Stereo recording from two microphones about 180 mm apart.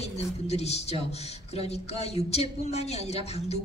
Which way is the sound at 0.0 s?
35° left (ahead or behind).